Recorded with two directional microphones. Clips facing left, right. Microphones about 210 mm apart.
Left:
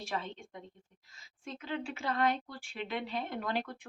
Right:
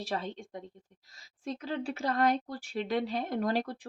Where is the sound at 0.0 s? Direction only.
35° right (ahead or behind).